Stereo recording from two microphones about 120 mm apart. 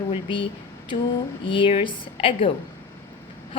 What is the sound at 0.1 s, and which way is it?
Speech, 45° left (ahead or behind).